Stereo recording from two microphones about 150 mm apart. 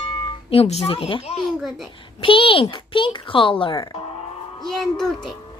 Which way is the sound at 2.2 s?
35° left (ahead or behind).